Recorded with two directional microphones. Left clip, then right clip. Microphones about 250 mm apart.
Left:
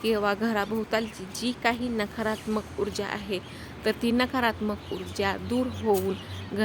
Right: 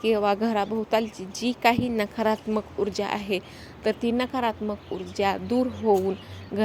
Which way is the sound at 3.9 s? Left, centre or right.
Centre.